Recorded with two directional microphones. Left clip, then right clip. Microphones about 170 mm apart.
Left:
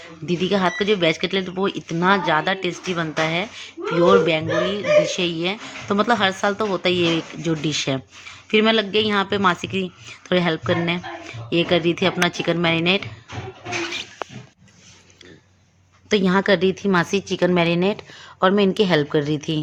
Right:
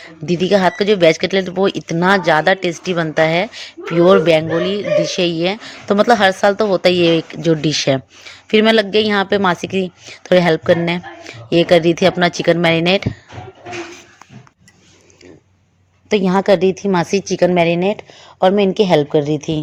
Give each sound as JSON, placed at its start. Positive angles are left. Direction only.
{"t": 0.0, "sound": "speech", "side_deg": -45}
{"t": 16.0, "sound": "a woman's voice", "side_deg": -10}
{"t": 17.5, "sound": "a woman's voice", "side_deg": -10}